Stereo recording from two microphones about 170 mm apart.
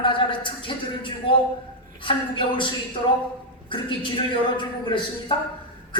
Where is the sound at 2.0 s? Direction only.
30° left (ahead or behind).